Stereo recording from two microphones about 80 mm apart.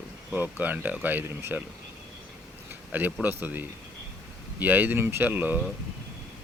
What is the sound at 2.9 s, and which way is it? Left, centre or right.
Speech, right.